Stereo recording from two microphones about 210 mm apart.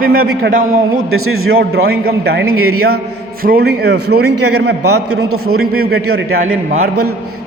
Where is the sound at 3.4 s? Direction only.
45° right (ahead or behind).